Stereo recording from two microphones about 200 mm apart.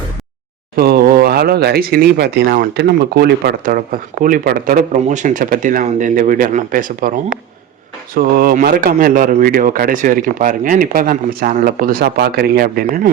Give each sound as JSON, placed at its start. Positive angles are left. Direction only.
{"t": 0.8, "sound": "speech", "side_deg": -50}
{"t": 8.1, "sound": "speech", "side_deg": -45}